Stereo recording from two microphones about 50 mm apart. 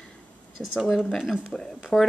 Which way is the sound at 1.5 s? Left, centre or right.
Centre.